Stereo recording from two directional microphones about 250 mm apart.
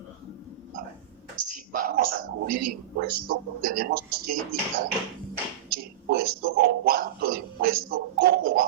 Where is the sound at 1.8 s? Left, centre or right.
Right.